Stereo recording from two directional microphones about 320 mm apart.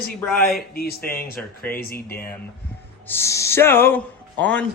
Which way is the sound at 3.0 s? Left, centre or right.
Centre.